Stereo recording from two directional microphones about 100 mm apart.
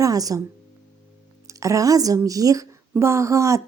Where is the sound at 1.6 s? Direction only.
35° right (ahead or behind).